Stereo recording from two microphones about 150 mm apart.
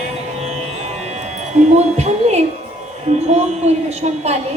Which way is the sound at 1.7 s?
45° right (ahead or behind).